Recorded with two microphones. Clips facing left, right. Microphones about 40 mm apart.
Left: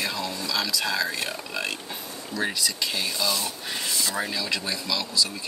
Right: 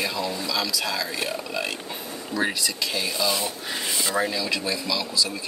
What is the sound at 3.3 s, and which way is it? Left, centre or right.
Speech, right.